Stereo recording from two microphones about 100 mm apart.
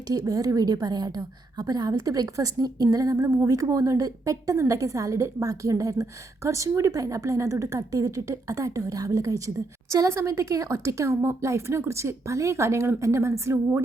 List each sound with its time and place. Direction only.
0.1 s a woman's voice: 35° right (ahead or behind)